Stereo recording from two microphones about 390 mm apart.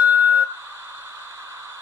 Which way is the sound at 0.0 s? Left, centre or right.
Centre.